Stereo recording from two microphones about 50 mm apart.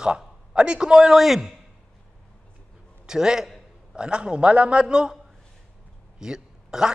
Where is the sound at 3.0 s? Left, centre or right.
Centre.